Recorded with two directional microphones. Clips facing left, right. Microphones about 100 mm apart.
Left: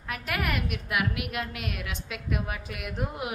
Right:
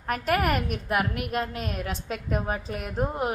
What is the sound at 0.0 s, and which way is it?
A woman's voice, 45° right (ahead or behind).